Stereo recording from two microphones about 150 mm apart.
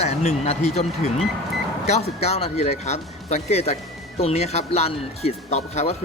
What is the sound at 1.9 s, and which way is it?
Speech, 45° left (ahead or behind).